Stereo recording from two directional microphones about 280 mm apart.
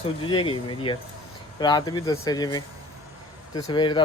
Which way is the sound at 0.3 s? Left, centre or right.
Centre.